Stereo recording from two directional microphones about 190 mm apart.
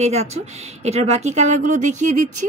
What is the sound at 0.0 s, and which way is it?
A woman's voice, 35° right (ahead or behind).